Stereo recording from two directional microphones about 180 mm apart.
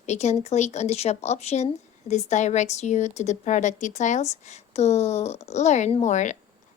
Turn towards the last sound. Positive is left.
turn(degrees=40)  # may be behind; listen again after turning